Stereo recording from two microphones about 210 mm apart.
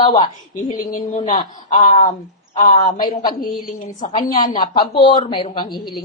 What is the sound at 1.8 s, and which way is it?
A woman's voice, 40° left (ahead or behind).